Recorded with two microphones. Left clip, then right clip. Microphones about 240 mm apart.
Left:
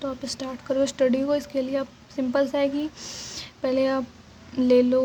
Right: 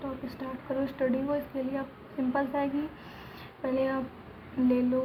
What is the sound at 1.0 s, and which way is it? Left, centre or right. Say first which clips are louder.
Speech: left 7 dB; left.